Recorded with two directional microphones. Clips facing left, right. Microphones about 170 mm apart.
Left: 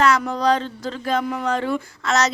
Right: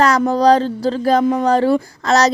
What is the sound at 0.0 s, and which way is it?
Speech, 35° right (ahead or behind).